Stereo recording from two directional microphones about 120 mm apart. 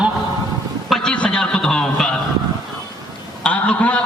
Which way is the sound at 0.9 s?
5° left (ahead or behind).